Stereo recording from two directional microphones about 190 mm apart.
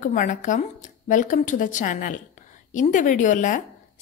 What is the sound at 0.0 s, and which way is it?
A woman's voice, 40° left (ahead or behind).